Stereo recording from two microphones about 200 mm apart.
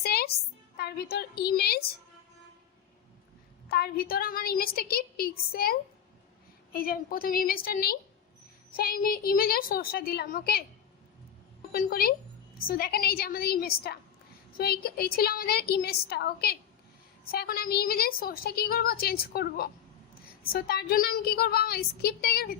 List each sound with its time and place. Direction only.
0.0 s music: 50° left (ahead or behind)
0.8 s a woman's voice: 55° left (ahead or behind)
3.7 s a woman's voice: 50° left (ahead or behind)
6.7 s a woman's voice: 50° left (ahead or behind)
11.7 s a woman's voice: 45° left (ahead or behind)